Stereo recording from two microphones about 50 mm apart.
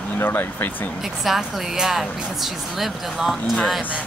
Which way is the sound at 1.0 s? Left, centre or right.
Centre.